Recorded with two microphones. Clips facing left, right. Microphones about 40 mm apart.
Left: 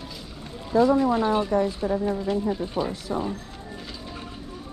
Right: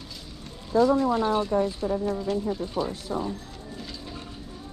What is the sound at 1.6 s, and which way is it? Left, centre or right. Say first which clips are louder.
Speech: left 2 dB; left.